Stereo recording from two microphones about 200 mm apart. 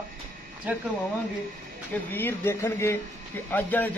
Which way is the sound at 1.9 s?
10° left (ahead or behind).